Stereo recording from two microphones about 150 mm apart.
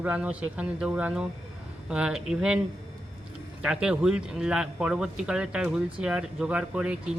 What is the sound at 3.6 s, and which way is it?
Speech, 5° right (ahead or behind).